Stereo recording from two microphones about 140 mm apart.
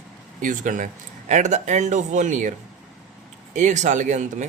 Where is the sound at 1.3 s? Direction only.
60° right (ahead or behind).